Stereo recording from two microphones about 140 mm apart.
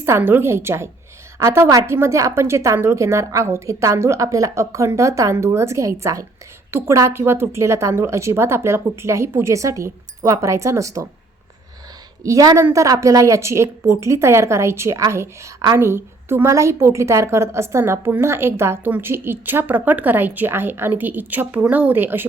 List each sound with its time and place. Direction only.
0.0 s a woman's voice: 15° right (ahead or behind)
12.2 s a woman's voice: 25° right (ahead or behind)